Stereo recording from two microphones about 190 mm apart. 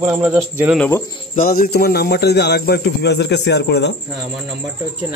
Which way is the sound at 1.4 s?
50° left (ahead or behind).